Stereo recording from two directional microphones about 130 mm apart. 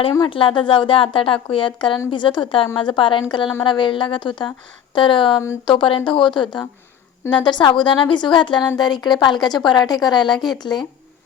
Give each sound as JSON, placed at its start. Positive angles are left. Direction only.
{"t": 0.3, "sound": "a woman's voice", "side_deg": 40}